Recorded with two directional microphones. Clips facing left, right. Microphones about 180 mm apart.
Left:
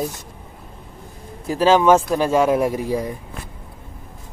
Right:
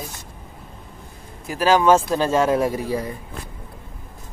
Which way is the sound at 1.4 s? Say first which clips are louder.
Left 2 dB; 25° left (ahead or behind).